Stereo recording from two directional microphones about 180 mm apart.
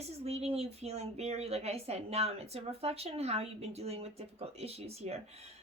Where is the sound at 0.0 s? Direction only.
35° right (ahead or behind).